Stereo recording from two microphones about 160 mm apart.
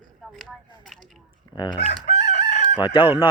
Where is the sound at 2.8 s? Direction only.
30° left (ahead or behind).